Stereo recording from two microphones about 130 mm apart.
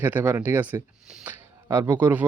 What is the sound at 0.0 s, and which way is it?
Speech, 15° right (ahead or behind).